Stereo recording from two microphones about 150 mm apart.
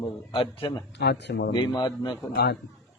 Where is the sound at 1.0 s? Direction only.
90° left.